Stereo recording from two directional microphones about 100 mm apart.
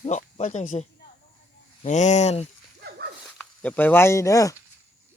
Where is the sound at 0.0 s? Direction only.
90° left.